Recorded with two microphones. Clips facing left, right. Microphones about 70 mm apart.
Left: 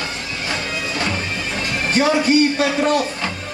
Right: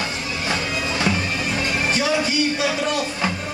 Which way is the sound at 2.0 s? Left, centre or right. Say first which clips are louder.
Left 9 dB; left.